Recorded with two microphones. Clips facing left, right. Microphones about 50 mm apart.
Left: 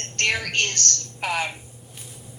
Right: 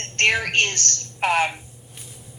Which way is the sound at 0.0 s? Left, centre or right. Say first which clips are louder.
Right 4 dB; right.